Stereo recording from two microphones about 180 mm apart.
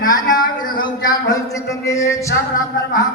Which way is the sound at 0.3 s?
25° left (ahead or behind).